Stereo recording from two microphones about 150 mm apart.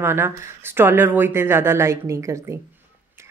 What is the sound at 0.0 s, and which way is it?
Speech, 15° right (ahead or behind).